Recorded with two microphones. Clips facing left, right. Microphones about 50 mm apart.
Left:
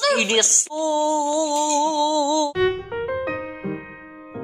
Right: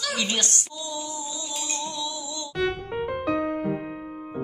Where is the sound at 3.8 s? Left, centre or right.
Left.